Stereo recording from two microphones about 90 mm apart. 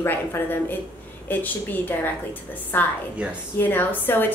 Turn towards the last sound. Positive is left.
turn(degrees=20)  # may be behind; listen again after turning